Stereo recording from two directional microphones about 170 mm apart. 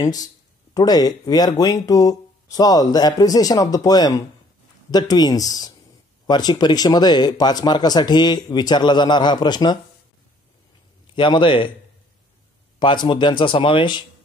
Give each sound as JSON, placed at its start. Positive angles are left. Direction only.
{"t": 0.0, "sound": "speech", "side_deg": 20}
{"t": 11.1, "sound": "speech", "side_deg": 30}
{"t": 12.7, "sound": "speech", "side_deg": 25}